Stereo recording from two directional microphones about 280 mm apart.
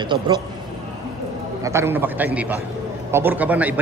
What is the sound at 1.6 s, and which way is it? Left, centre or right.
A man's voice, centre.